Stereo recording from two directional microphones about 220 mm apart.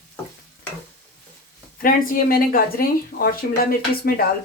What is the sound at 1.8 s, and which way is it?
Speech, 40° left (ahead or behind).